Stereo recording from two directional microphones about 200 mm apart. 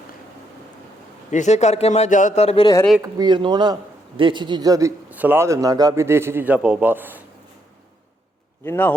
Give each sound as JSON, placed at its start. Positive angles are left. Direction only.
{"t": 1.3, "sound": "a man's voice", "side_deg": 35}
{"t": 3.0, "sound": "a man's voice", "side_deg": -20}
{"t": 8.6, "sound": "speech", "side_deg": 10}